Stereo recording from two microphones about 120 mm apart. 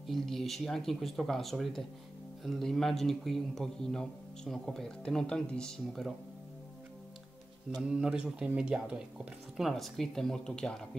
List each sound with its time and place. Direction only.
0.0 s a man's voice: centre (ahead or behind)
7.9 s a man's voice: 5° right (ahead or behind)